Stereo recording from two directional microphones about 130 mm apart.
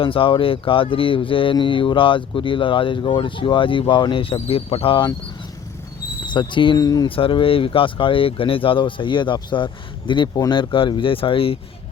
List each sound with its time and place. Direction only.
0.0 s speech: 45° left (ahead or behind)
6.2 s speech: 35° left (ahead or behind)
7.2 s speech: 40° left (ahead or behind)